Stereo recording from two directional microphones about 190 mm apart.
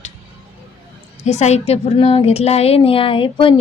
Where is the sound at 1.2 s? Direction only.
35° left (ahead or behind).